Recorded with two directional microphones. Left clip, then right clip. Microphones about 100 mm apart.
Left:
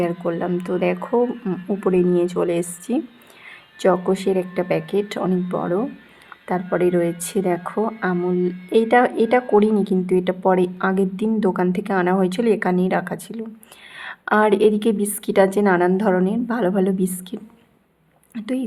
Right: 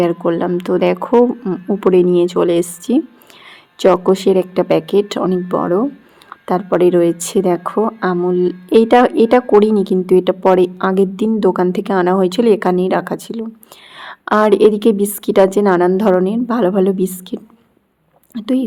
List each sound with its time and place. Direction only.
0.0 s a woman's voice: 40° right (ahead or behind)
1.3 s speech: 20° right (ahead or behind)
1.8 s a woman's voice: 40° right (ahead or behind)